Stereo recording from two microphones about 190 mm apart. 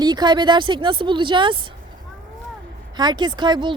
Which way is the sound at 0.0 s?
20° right (ahead or behind).